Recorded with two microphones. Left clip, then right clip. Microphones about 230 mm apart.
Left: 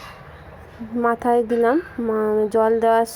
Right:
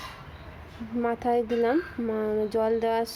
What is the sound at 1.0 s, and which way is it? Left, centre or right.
Speech, centre.